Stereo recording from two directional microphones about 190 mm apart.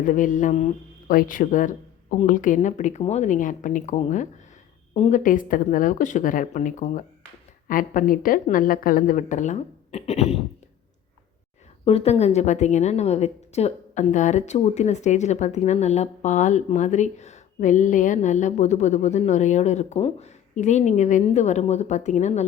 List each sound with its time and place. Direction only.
0.0 s a woman's voice: 45° left (ahead or behind)
11.9 s a woman's voice: 35° left (ahead or behind)